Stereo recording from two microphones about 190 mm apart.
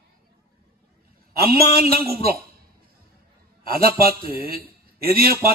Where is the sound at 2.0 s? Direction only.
50° right (ahead or behind).